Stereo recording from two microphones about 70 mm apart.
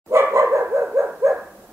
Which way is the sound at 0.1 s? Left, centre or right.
Right.